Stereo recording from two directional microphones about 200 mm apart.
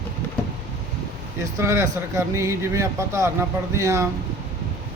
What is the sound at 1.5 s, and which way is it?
Speech, 15° right (ahead or behind).